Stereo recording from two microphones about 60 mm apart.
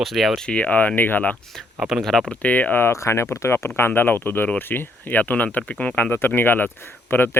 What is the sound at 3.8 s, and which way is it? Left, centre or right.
Speech, left.